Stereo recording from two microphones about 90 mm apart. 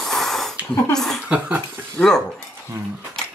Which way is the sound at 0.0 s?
5° left (ahead or behind).